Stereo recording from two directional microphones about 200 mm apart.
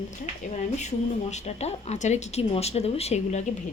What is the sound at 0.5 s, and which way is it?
A woman's voice, 35° left (ahead or behind).